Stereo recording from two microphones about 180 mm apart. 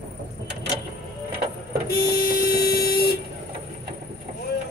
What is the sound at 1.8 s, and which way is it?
Vehicle, 60° left (ahead or behind).